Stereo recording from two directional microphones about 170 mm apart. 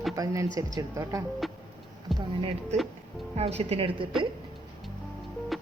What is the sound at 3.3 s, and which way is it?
Speech, 35° right (ahead or behind).